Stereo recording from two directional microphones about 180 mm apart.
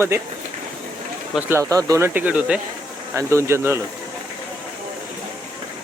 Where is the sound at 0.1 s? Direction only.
15° right (ahead or behind).